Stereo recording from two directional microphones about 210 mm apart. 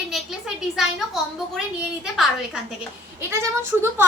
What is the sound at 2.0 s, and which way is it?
Speech, centre (ahead or behind).